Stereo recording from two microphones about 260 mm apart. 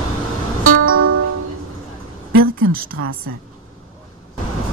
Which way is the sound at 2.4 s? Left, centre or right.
Right.